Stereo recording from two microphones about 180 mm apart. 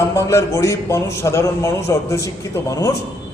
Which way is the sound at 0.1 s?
15° left (ahead or behind).